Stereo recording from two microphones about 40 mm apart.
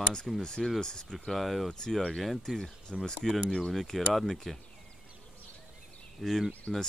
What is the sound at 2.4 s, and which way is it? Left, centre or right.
Speech, centre.